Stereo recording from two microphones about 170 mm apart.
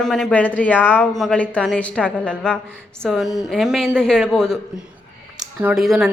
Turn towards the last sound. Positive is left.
turn(degrees=0)  # may be behind; listen again after turning